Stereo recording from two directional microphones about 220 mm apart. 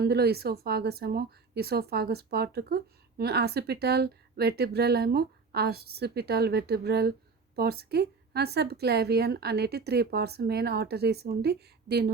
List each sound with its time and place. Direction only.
0.0 s speech: 45° right (ahead or behind)